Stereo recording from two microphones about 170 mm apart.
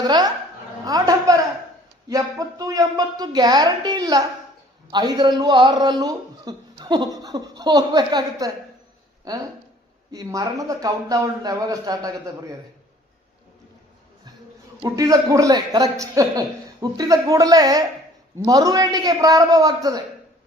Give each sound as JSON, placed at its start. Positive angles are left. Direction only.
{"t": 0.0, "sound": "a man's voice", "side_deg": -25}
{"t": 14.8, "sound": "a man's voice", "side_deg": -20}